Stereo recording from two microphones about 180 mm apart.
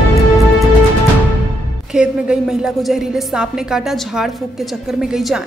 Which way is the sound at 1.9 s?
5° right (ahead or behind).